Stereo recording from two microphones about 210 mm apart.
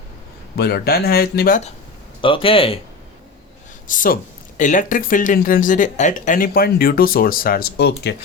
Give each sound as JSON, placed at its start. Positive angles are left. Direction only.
{"t": 0.5, "sound": "speech", "side_deg": 50}
{"t": 2.2, "sound": "speech", "side_deg": 25}
{"t": 3.8, "sound": "speech", "side_deg": 40}